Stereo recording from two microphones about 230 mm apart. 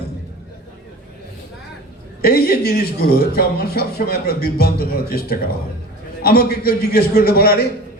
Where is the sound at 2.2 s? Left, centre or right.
Left.